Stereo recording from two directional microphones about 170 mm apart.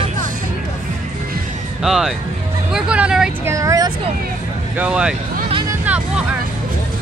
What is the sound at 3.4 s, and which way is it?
Speech, 20° right (ahead or behind).